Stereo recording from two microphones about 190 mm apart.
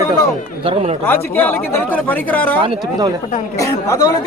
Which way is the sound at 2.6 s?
25° right (ahead or behind).